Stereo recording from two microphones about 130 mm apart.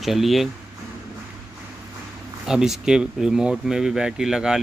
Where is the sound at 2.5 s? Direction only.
5° right (ahead or behind).